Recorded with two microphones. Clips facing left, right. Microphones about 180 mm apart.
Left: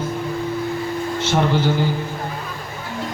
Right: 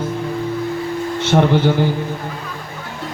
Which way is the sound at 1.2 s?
60° right (ahead or behind).